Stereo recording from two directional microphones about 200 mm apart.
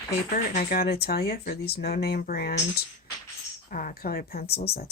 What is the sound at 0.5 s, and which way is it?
A woman's voice, 45° left (ahead or behind).